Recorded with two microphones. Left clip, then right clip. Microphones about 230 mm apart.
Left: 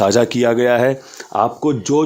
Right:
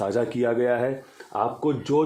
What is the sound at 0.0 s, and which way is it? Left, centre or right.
Speech, left.